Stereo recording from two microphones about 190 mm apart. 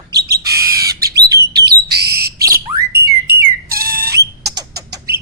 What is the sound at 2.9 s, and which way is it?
Whistle, 55° right (ahead or behind).